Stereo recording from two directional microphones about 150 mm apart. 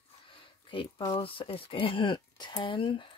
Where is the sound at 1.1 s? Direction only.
35° left (ahead or behind).